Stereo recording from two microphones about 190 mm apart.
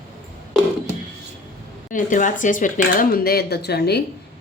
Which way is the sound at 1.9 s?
45° left (ahead or behind).